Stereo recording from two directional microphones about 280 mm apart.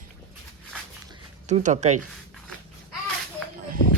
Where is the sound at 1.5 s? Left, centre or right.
Right.